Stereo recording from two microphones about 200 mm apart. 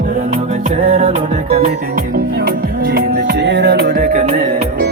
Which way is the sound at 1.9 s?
50° right (ahead or behind).